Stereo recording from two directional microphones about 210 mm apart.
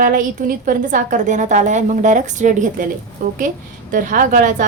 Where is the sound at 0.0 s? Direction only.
40° right (ahead or behind).